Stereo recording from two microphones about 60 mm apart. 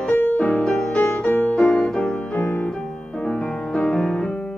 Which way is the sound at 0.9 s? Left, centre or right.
Centre.